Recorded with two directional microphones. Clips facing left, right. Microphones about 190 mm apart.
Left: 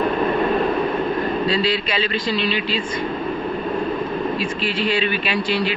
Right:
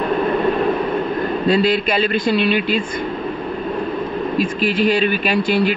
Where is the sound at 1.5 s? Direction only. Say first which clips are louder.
Right 5 dB; 50° right (ahead or behind).